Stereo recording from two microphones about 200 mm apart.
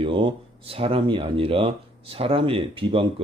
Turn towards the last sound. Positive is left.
turn(degrees=-25)  # may be behind; listen again after turning